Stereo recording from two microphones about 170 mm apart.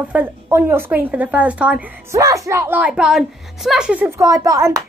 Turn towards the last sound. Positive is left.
turn(degrees=-20)  # may be behind; listen again after turning